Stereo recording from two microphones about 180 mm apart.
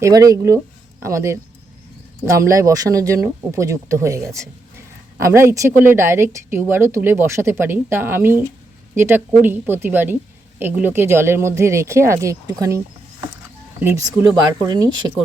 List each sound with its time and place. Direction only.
0.0 s speech: 20° right (ahead or behind)
13.8 s speech: 15° right (ahead or behind)